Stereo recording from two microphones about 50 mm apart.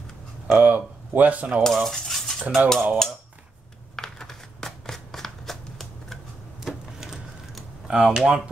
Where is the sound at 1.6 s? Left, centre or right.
Centre.